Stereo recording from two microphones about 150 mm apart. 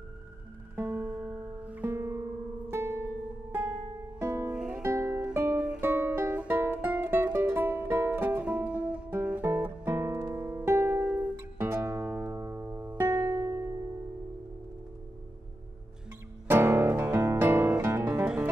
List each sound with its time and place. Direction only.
0.7 s music: 15° right (ahead or behind)
4.2 s music: 15° right (ahead or behind)
4.6 s music: 5° right (ahead or behind)
4.8 s music: 20° right (ahead or behind)
16.4 s music: 15° right (ahead or behind)